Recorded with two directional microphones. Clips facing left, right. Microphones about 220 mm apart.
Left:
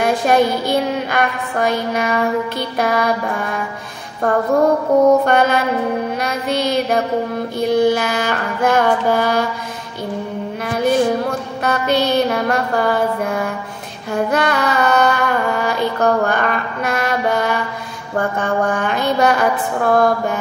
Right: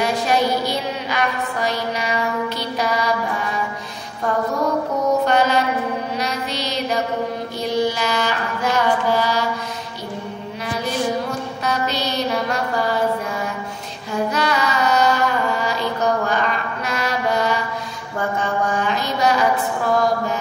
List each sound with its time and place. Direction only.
0.0 s music: 55° left (ahead or behind)
4.2 s mantra: 55° left (ahead or behind)
4.9 s music: 50° left (ahead or behind)
5.2 s mantra: 55° left (ahead or behind)
6.1 s child singing: 50° left (ahead or behind)
7.7 s mantra: 50° left (ahead or behind)
11.6 s mantra: 55° left (ahead or behind)
14.1 s carnatic music: 55° left (ahead or behind)
18.1 s a sound: 55° left (ahead or behind)